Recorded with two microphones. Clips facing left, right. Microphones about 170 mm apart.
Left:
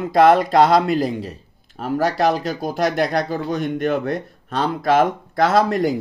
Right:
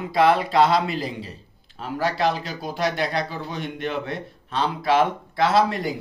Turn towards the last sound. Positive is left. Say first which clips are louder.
# left 4 dB
turn(degrees=45)  # may be behind; listen again after turning